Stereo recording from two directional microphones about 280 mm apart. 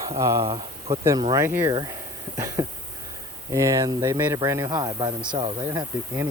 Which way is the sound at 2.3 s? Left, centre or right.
Centre.